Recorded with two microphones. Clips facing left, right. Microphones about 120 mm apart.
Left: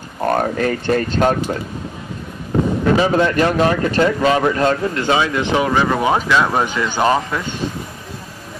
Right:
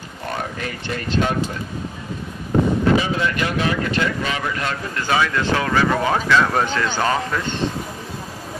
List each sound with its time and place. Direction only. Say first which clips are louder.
0.3 s speech: left 10 dB; 45° left (ahead or behind)
3.0 s speech: left 7 dB; 45° left (ahead or behind); by 7.6 s 5° left (ahead or behind)